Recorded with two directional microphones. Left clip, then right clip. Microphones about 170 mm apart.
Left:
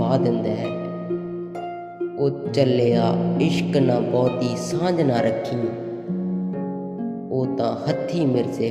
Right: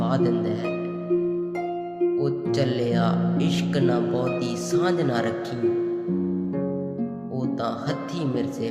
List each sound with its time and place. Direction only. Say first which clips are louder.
0.0 s speech: left 3 dB; 15° left (ahead or behind)
2.1 s speech: left 3 dB; 15° left (ahead or behind)
7.3 s speech: left 5 dB; 15° left (ahead or behind)